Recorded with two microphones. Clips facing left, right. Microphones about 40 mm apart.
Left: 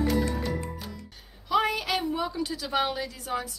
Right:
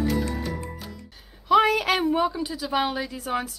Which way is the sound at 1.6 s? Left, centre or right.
Right.